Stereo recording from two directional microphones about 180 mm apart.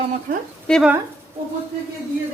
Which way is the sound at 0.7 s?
Centre (ahead or behind).